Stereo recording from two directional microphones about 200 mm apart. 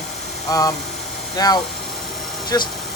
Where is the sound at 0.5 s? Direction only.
15° left (ahead or behind).